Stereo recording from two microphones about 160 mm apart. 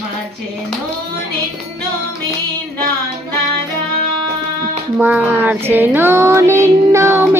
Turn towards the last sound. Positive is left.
turn(degrees=-15)  # may be behind; listen again after turning